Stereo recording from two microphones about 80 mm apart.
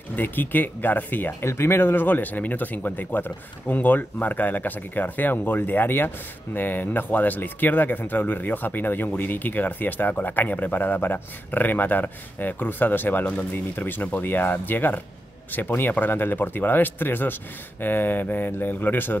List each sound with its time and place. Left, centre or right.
0.1 s speech: left